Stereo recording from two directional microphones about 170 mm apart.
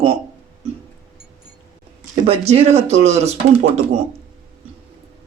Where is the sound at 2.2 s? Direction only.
35° right (ahead or behind).